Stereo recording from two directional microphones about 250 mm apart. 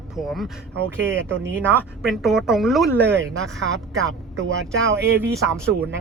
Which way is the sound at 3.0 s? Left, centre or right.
Right.